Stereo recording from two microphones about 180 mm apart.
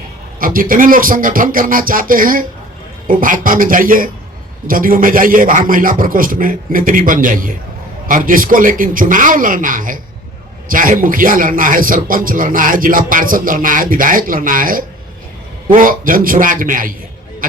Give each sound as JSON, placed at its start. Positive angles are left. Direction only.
{"t": 0.3, "sound": "a man's voice", "side_deg": -50}